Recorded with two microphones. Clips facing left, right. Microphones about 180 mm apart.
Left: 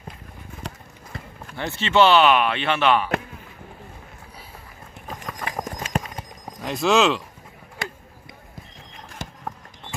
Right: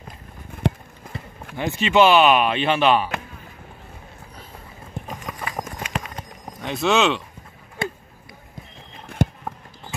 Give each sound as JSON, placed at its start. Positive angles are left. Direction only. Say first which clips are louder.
{"t": 1.6, "sound": "speech", "louder": "right 2 dB", "side_deg": -15}
{"t": 5.2, "sound": "clip-clop", "louder": "left 3 dB", "side_deg": -10}
{"t": 6.6, "sound": "speech", "louder": "left 1 dB", "side_deg": 0}
{"t": 9.2, "sound": "a sound", "louder": "right 15 dB", "side_deg": -55}